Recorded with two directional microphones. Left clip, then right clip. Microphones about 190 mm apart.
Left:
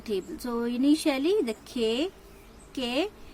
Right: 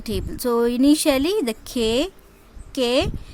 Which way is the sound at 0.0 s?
60° right (ahead or behind).